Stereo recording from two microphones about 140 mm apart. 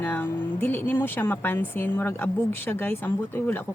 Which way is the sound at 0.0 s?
15° left (ahead or behind).